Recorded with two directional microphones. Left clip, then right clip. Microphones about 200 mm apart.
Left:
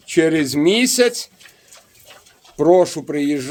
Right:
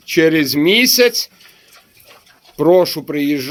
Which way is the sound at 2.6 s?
10° left (ahead or behind).